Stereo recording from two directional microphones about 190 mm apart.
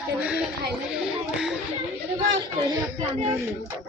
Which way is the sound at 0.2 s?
5° right (ahead or behind).